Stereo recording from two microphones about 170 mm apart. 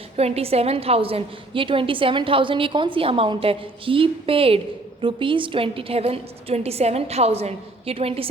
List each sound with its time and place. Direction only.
0.2 s a woman's voice: 35° right (ahead or behind)